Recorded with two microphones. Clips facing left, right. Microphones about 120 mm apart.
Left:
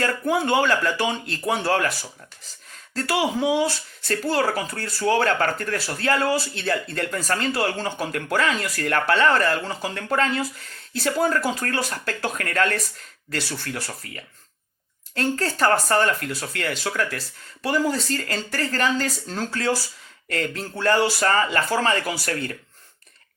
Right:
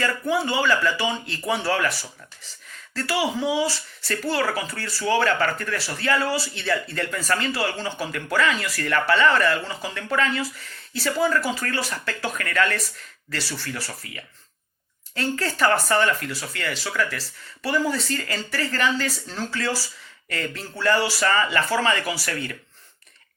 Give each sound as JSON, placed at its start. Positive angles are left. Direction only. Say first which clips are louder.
{"t": 0.0, "sound": "speech", "louder": "left 1 dB", "side_deg": 50}
{"t": 2.9, "sound": "speech", "louder": "left 2 dB", "side_deg": 45}